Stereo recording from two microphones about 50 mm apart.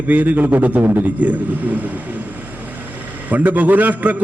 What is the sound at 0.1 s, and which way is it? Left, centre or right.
A man's voice, right.